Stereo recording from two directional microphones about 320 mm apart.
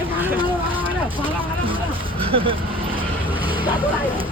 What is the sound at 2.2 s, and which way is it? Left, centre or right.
Speech, centre.